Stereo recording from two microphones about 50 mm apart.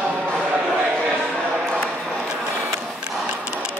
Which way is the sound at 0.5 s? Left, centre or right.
Right.